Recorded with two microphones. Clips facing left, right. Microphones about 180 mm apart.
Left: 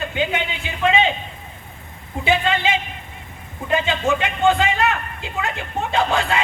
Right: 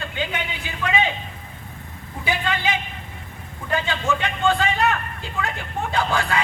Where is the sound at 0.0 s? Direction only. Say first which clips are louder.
Left 5 dB; 20° left (ahead or behind).